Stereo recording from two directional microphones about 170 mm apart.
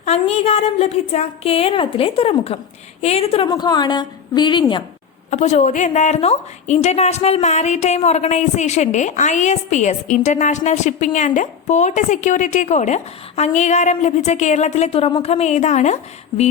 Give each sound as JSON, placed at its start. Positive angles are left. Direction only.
{"t": 0.0, "sound": "a woman's voice", "side_deg": 40}
{"t": 3.5, "sound": "a woman's voice", "side_deg": 25}
{"t": 5.3, "sound": "a woman's voice", "side_deg": 40}